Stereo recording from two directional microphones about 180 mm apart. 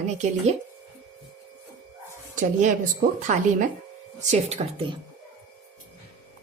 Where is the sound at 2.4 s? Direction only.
45° right (ahead or behind).